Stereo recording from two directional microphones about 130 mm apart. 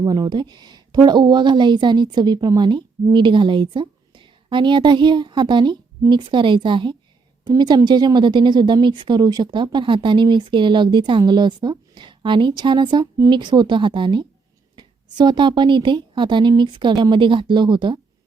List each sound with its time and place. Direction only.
0.0 s a woman's voice: 30° right (ahead or behind)